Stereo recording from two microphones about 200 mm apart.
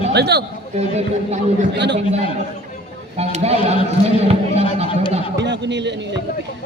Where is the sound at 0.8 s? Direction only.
35° right (ahead or behind).